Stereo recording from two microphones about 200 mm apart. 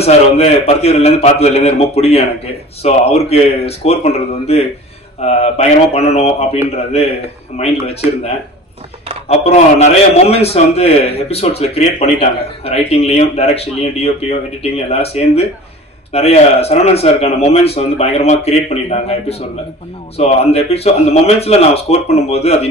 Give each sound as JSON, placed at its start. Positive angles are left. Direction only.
{"t": 0.0, "sound": "a man's voice", "side_deg": 30}
{"t": 9.3, "sound": "a man's voice", "side_deg": 30}